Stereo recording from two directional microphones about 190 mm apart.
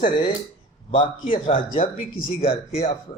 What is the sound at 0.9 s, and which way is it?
Speech, 30° left (ahead or behind).